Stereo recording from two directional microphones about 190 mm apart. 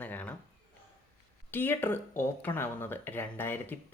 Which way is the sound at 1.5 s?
10° left (ahead or behind).